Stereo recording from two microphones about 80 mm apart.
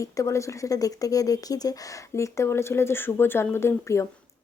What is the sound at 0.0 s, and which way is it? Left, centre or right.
A woman's voice, left.